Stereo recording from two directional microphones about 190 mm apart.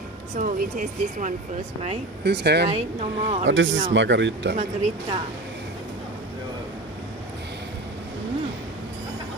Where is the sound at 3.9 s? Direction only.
70° right (ahead or behind).